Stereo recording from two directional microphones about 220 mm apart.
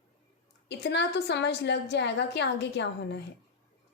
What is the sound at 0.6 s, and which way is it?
A woman's voice, 50° left (ahead or behind).